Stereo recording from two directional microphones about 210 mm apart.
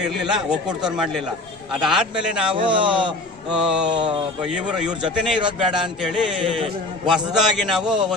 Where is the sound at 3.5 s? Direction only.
5° right (ahead or behind).